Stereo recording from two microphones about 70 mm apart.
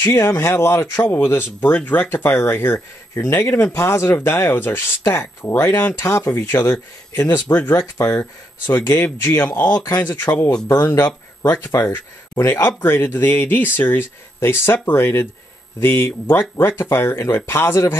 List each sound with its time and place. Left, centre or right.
0.0 s speech: left
11.5 s speech: left